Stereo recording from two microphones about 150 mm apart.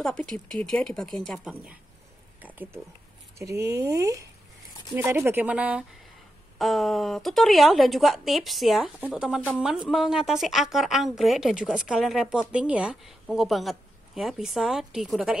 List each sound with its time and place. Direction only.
0.0 s speech: 5° left (ahead or behind)
2.4 s a sound: 10° right (ahead or behind)
3.3 s speech: 20° right (ahead or behind); by 15.3 s centre (ahead or behind)